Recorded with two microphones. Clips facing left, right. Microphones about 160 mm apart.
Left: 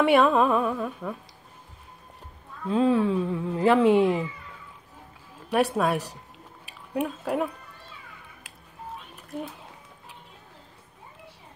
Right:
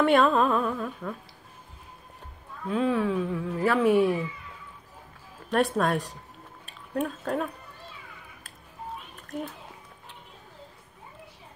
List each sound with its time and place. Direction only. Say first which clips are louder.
0.0 s music: left 1 dB; 10° left (ahead or behind)
2.7 s speech: left 3 dB; 30° left (ahead or behind)
5.5 s speech: left 1 dB; 5° left (ahead or behind)